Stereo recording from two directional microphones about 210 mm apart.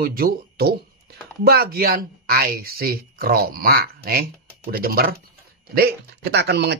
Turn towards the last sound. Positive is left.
turn(degrees=-55)  # may be behind; listen again after turning